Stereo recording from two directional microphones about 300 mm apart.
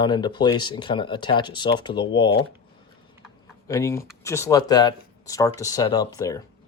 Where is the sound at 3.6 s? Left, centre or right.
Centre.